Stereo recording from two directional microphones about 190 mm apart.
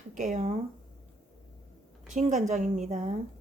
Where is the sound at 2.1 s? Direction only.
40° right (ahead or behind).